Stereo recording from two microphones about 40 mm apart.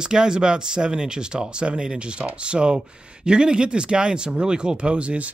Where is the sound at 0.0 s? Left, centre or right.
Centre.